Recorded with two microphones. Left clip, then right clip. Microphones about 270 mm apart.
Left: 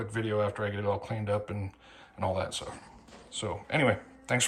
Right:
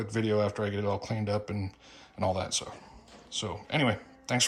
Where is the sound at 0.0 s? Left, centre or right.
Right.